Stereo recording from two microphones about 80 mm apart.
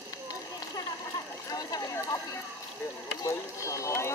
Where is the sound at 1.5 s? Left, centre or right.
Left.